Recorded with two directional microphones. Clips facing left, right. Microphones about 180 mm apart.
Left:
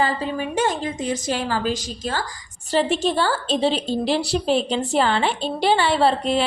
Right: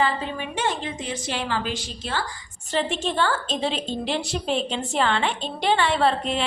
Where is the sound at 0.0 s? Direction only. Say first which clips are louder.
Left 2 dB; 40° left (ahead or behind).